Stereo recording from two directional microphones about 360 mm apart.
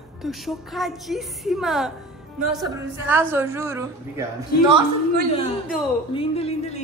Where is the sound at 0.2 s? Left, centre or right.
Centre.